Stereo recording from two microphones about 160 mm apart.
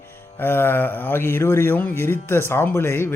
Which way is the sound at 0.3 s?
15° left (ahead or behind).